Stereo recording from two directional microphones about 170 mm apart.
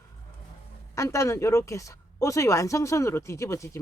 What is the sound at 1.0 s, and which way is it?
Speech, 15° left (ahead or behind).